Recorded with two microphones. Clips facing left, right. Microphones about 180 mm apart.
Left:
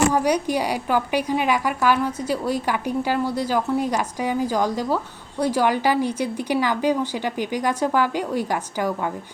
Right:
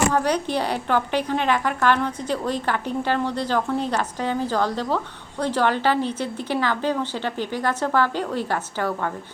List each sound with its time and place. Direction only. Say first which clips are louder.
0.1 s a woman's voice: left 2 dB; 10° left (ahead or behind)